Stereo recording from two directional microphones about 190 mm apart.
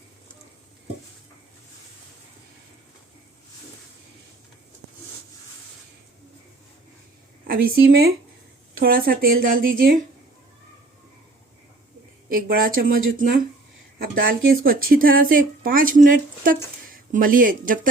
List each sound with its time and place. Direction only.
7.4 s speech: 50° right (ahead or behind)
12.3 s speech: 50° right (ahead or behind)